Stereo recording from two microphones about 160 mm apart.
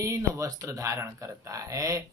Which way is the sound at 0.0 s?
20° right (ahead or behind).